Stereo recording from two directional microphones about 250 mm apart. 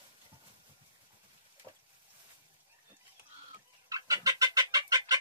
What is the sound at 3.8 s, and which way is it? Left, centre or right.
Chicken, centre.